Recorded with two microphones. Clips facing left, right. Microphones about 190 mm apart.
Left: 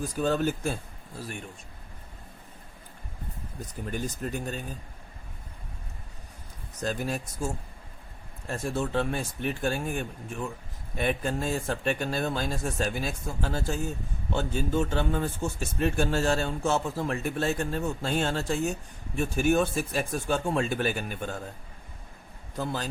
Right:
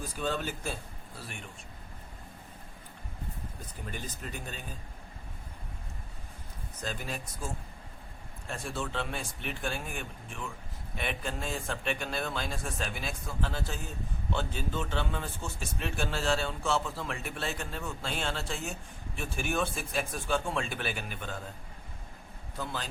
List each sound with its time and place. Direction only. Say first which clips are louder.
0.0 s speech: left 7 dB; 45° left (ahead or behind)
3.9 s speech: left 9 dB; 45° left (ahead or behind)
6.8 s speech: left 7 dB; 45° left (ahead or behind)
8.5 s speech: left 7 dB; 45° left (ahead or behind)
22.5 s speech: left 6 dB; 40° left (ahead or behind)